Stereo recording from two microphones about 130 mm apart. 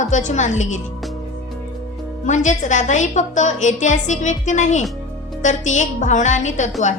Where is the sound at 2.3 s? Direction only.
70° left (ahead or behind).